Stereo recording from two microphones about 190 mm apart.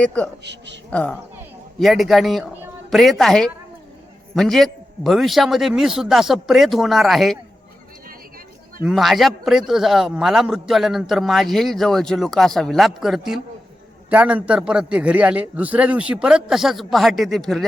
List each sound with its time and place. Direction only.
0.0 s a man's voice: 5° left (ahead or behind)
0.4 s speech: 65° right (ahead or behind)
0.9 s a man's voice: 5° left (ahead or behind)
8.8 s a man's voice: centre (ahead or behind)